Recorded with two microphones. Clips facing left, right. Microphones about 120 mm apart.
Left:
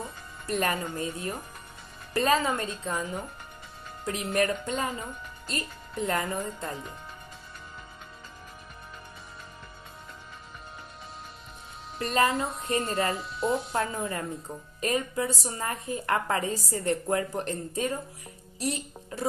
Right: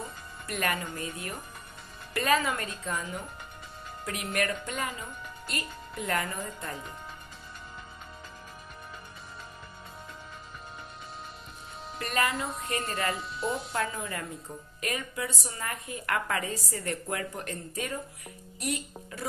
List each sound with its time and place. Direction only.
0.5 s speech: 25° left (ahead or behind)
12.0 s speech: 30° left (ahead or behind)
13.1 s speech: centre (ahead or behind)
13.7 s a woman's voice: 30° left (ahead or behind)